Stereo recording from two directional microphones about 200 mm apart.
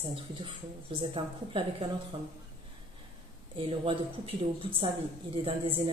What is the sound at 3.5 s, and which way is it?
Speech, 25° right (ahead or behind).